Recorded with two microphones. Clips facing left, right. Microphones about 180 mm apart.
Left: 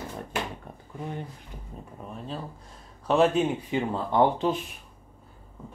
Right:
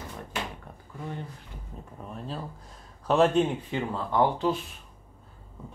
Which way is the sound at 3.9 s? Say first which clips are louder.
Left 2 dB; 20° left (ahead or behind).